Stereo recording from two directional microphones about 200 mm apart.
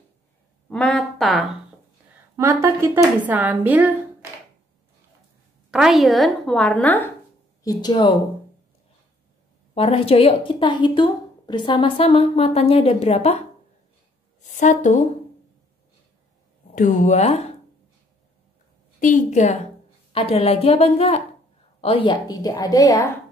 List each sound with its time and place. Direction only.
0.7 s speech: 5° left (ahead or behind)
2.3 s speech: 15° right (ahead or behind)
5.7 s a woman's voice: centre (ahead or behind)
7.6 s a woman's voice: 20° left (ahead or behind)
9.8 s a woman's voice: 30° left (ahead or behind)
14.4 s a woman's voice: 40° left (ahead or behind)
16.7 s speech: 40° left (ahead or behind)
18.9 s a woman's voice: 40° left (ahead or behind); by 23.0 s 15° left (ahead or behind)